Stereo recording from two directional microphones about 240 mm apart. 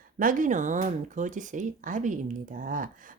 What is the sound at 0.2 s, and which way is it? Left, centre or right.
Speech, right.